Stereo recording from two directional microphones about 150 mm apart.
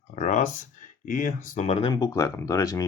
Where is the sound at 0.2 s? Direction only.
55° left (ahead or behind).